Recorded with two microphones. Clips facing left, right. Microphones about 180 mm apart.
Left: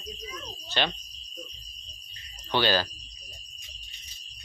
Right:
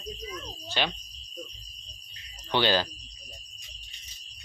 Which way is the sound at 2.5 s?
20° right (ahead or behind).